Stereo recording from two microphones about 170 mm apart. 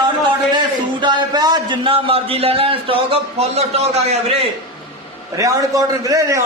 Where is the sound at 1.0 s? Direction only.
25° right (ahead or behind).